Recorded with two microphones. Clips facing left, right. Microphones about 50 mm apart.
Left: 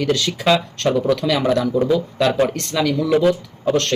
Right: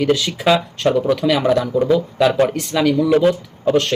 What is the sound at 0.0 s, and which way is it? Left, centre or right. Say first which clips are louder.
Speech: right 2 dB; centre.